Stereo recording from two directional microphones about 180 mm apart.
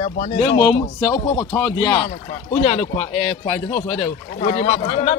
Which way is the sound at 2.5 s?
30° left (ahead or behind).